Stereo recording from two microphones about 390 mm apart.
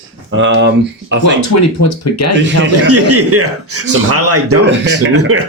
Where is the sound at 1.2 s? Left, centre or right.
Left.